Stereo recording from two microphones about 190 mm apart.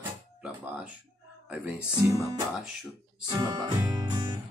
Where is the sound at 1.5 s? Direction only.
10° right (ahead or behind).